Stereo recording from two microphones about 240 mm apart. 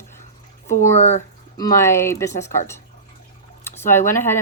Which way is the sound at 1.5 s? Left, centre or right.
Centre.